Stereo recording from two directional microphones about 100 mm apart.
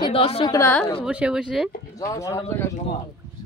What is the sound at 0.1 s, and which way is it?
Speech, 75° left (ahead or behind).